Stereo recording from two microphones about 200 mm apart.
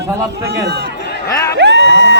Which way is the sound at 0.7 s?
60° right (ahead or behind).